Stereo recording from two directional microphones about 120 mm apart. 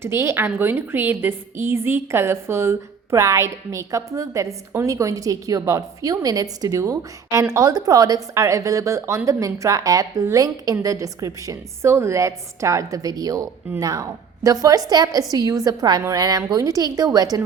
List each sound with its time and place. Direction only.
0.0 s a woman's voice: 20° right (ahead or behind)